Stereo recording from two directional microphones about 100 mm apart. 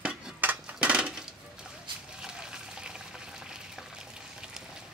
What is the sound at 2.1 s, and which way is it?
Water, 5° right (ahead or behind).